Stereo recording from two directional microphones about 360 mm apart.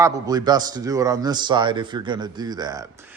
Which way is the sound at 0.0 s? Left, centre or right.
Centre.